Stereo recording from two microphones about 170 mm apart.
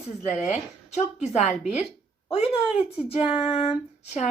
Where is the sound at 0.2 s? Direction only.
40° left (ahead or behind).